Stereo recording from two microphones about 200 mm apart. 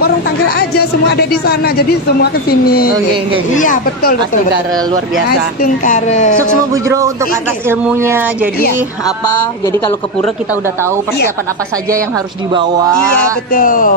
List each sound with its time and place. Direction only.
0.6 s speech: 50° left (ahead or behind)
5.6 s speech: 40° left (ahead or behind)
6.7 s speech: 15° right (ahead or behind)
9.0 s a sound: 20° left (ahead or behind)
13.5 s speech: 45° left (ahead or behind)